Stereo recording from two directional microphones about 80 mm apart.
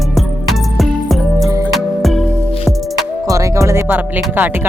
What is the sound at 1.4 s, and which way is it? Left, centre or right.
Music, right.